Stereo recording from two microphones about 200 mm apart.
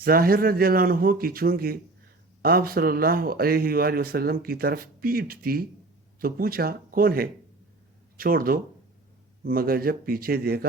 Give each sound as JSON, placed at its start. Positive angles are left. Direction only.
{"t": 0.0, "sound": "speech", "side_deg": -45}